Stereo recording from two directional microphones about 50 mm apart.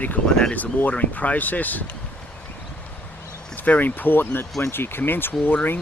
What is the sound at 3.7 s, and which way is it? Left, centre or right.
Speech, left.